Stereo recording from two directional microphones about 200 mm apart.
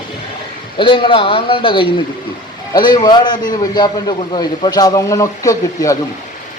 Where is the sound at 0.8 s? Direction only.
25° left (ahead or behind).